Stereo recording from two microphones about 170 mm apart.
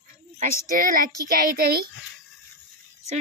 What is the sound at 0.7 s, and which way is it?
Speech, 55° right (ahead or behind).